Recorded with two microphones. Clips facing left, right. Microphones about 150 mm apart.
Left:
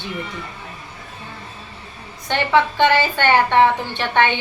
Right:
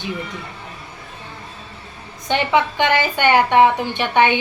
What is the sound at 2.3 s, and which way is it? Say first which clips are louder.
A woman's voice: even; 15° right (ahead or behind).